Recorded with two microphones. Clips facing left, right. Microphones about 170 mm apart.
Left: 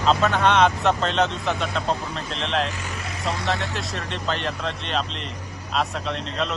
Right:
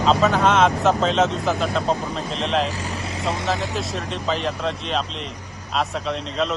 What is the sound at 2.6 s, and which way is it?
Vehicle, 35° right (ahead or behind).